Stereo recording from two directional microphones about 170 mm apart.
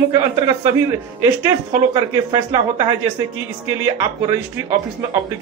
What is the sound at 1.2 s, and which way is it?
Speech, 15° right (ahead or behind).